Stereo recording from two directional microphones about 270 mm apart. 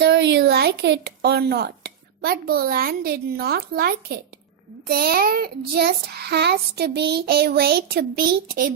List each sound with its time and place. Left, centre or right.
0.0 s speech: right
4.9 s child singing: right